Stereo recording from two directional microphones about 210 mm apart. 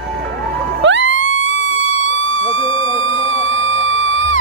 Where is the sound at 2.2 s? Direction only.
70° right (ahead or behind).